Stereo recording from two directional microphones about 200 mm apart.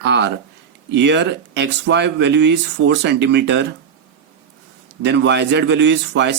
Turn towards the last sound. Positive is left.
turn(degrees=-60)  # may be behind; listen again after turning